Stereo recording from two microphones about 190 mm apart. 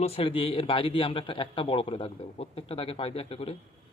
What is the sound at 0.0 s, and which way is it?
A man's voice, 30° left (ahead or behind).